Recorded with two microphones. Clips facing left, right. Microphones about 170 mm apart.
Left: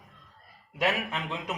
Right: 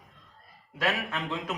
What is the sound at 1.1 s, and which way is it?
Speech, 20° left (ahead or behind).